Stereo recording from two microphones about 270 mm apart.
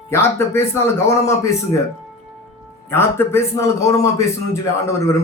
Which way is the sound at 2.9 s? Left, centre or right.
Centre.